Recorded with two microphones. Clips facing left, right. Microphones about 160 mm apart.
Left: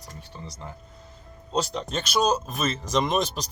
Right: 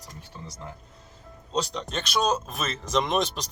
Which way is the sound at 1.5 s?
Centre (ahead or behind).